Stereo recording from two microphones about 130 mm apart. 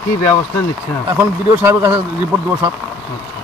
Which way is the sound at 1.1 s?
20° right (ahead or behind).